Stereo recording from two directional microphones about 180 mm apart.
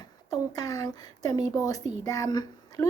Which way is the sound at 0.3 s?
20° left (ahead or behind).